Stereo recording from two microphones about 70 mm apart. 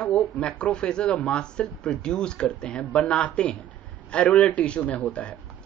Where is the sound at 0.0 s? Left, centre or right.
Centre.